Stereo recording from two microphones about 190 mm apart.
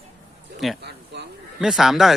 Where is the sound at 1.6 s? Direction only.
Centre (ahead or behind).